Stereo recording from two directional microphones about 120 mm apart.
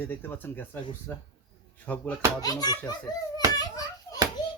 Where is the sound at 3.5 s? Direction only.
30° left (ahead or behind).